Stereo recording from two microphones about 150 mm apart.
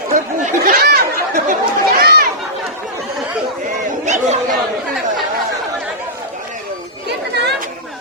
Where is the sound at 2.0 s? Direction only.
90° right.